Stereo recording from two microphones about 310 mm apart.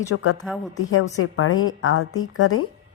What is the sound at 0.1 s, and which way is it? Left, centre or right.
A woman's voice, left.